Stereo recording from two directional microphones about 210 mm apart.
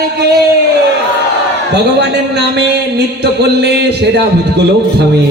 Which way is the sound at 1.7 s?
55° right (ahead or behind).